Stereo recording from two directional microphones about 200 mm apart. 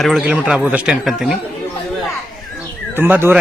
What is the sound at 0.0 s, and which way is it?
Speech, centre (ahead or behind).